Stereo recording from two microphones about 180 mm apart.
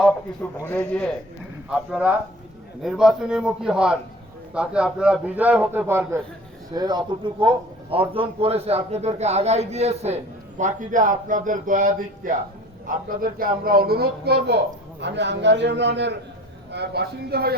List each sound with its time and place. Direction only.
0.6 s a man's voice: 5° left (ahead or behind)
1.7 s a man's voice: 5° right (ahead or behind)
6.7 s a man's voice: 25° right (ahead or behind); by 17.5 s 60° right (ahead or behind)